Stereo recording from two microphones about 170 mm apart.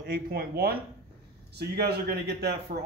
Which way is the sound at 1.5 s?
75° right (ahead or behind).